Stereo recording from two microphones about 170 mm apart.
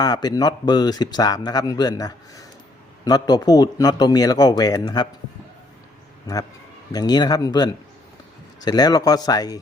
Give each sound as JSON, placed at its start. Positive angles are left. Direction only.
{"t": 0.0, "sound": "a man's voice", "side_deg": 25}
{"t": 6.9, "sound": "a man's voice", "side_deg": 25}